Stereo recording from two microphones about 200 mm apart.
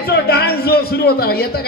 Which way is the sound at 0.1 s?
55° left (ahead or behind).